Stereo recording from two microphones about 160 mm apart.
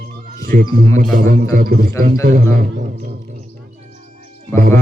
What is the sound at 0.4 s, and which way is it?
A man's voice, 65° right (ahead or behind).